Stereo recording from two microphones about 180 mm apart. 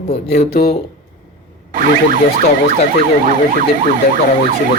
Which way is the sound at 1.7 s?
50° right (ahead or behind).